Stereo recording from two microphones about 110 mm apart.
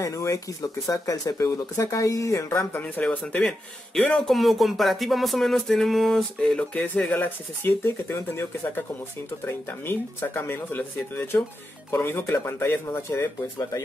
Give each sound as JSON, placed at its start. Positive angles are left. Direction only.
{"t": 0.0, "sound": "speech", "side_deg": 30}
{"t": 2.8, "sound": "speech", "side_deg": 10}